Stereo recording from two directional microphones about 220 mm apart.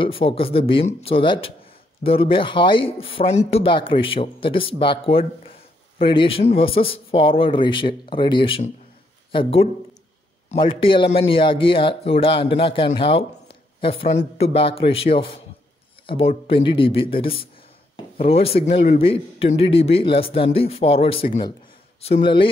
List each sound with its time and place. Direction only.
0.0 s speech: 25° left (ahead or behind)